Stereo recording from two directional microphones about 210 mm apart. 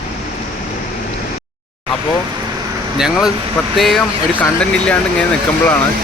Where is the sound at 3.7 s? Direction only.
Centre (ahead or behind).